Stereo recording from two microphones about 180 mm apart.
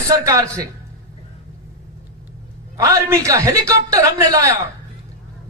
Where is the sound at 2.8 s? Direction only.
20° right (ahead or behind).